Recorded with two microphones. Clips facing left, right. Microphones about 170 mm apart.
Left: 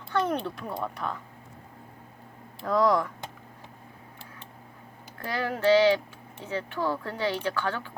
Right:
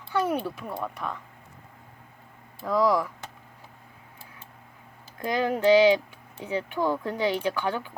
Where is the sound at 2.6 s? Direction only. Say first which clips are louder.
Even; centre (ahead or behind).